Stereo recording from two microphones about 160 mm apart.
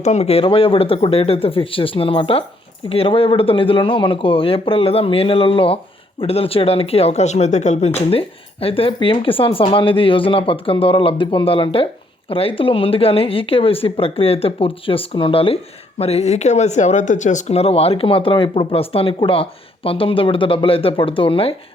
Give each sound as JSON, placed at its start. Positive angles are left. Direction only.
{"t": 0.0, "sound": "speech", "side_deg": 45}